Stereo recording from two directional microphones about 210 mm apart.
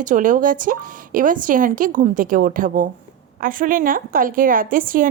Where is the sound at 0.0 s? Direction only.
40° right (ahead or behind).